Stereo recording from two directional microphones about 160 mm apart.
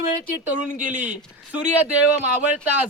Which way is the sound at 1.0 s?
10° right (ahead or behind).